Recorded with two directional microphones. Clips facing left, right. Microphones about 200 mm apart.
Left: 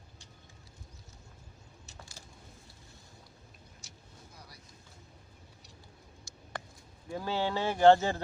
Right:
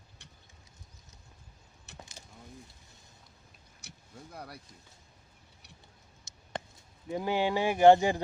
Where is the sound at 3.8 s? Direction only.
60° right (ahead or behind).